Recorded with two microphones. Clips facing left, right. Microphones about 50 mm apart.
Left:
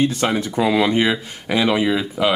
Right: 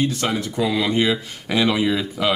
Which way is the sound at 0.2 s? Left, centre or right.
Left.